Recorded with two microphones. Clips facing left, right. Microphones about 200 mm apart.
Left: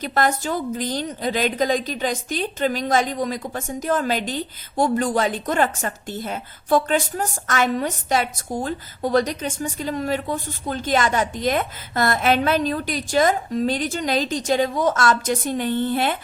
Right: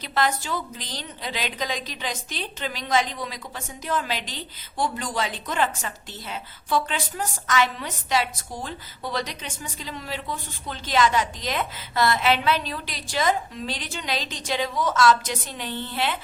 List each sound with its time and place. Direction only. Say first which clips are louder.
0.0 s a woman's voice: left 4 dB; 50° left (ahead or behind)